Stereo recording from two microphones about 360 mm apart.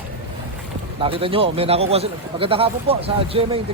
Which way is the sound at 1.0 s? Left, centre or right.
Centre.